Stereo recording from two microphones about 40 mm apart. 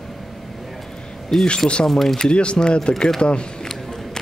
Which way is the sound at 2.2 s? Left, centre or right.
Left.